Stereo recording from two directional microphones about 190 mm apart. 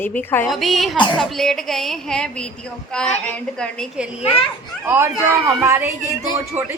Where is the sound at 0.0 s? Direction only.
10° left (ahead or behind).